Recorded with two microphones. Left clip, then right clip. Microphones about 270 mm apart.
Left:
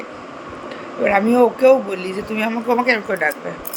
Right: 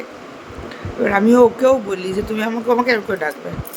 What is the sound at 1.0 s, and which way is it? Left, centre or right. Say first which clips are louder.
A man's voice: right 2 dB; centre.